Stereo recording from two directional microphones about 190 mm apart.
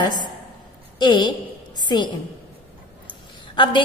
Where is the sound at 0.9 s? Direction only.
20° left (ahead or behind).